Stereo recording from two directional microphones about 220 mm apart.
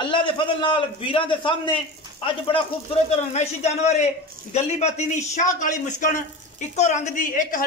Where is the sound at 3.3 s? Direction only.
30° left (ahead or behind).